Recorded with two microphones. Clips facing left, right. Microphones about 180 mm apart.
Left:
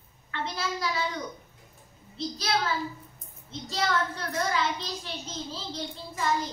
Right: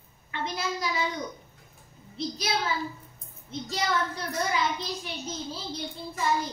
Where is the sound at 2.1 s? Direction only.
15° right (ahead or behind).